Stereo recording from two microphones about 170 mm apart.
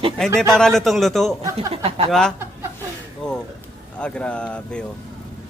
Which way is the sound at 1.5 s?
35° right (ahead or behind).